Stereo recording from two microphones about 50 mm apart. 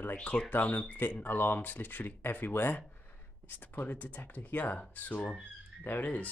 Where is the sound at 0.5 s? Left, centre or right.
Left.